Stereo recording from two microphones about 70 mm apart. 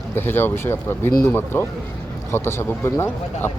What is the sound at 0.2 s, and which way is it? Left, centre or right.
Speech, left.